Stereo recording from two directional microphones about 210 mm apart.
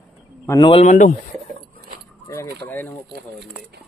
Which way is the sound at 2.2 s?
15° left (ahead or behind).